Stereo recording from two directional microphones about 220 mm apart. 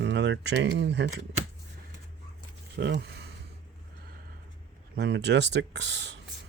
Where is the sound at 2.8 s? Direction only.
50° right (ahead or behind).